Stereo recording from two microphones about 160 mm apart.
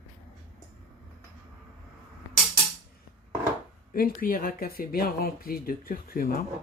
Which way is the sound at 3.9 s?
65° left (ahead or behind).